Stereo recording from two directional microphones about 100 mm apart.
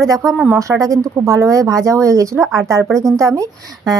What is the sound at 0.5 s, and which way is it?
Speech, 30° right (ahead or behind).